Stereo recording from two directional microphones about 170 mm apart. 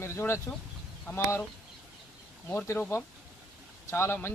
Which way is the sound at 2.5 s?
10° left (ahead or behind).